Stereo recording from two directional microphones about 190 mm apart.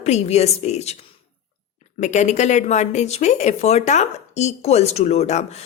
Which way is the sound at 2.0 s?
40° left (ahead or behind).